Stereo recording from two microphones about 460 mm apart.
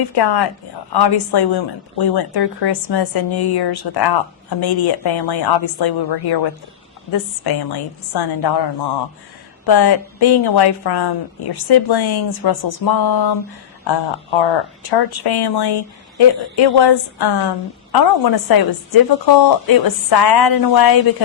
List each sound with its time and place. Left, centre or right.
0.1 s speech: left
9.6 s a woman's voice: left
13.8 s a woman's voice: left